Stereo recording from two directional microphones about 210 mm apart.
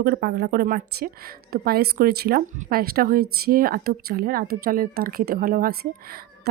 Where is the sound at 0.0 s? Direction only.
45° right (ahead or behind).